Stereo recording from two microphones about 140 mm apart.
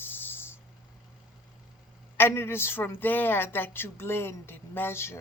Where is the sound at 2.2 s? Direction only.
15° left (ahead or behind).